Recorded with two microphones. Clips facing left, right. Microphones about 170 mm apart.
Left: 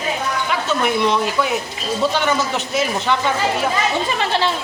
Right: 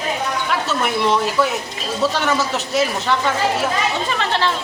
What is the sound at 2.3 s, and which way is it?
Speech, centre (ahead or behind).